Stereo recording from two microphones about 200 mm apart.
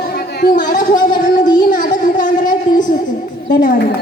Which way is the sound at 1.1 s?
20° left (ahead or behind).